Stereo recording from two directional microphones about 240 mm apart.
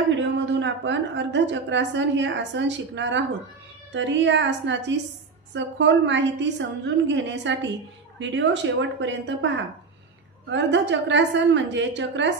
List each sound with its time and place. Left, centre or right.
0.1 s a woman's voice: right
10.5 s a woman's voice: right